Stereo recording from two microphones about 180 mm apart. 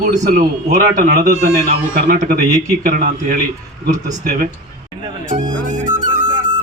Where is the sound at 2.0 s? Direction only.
50° right (ahead or behind).